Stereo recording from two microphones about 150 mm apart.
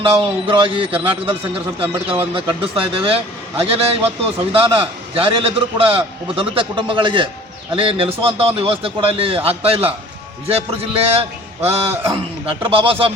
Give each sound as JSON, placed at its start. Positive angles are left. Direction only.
{"t": 0.0, "sound": "a man's voice", "side_deg": -35}